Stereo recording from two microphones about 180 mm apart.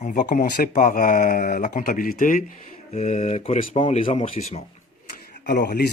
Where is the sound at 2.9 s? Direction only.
40° left (ahead or behind).